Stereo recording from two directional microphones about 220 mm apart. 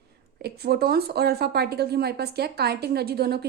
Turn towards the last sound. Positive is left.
turn(degrees=-45)  # may be behind; listen again after turning